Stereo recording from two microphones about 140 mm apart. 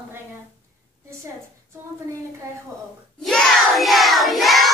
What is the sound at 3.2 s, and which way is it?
Child singing, centre (ahead or behind).